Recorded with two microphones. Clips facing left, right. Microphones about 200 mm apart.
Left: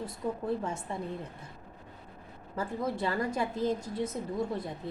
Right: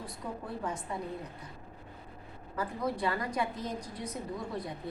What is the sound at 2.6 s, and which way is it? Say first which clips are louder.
A woman's voice: left 1 dB; 25° left (ahead or behind).